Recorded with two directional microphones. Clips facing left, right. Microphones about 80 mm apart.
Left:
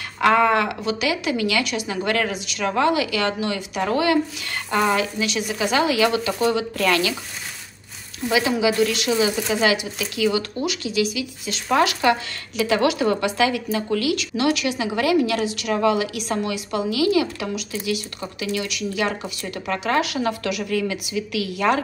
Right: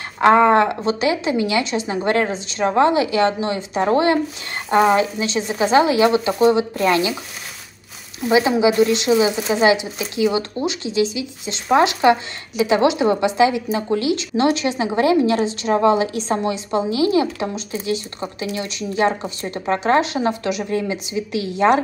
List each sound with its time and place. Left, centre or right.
0.2 s speech: right
8.3 s speech: right